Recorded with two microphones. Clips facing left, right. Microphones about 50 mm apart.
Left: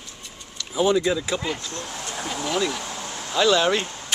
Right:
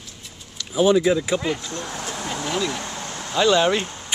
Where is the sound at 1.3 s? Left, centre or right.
Centre.